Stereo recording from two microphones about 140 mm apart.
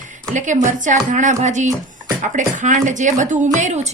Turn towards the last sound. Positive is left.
turn(degrees=-60)  # may be behind; listen again after turning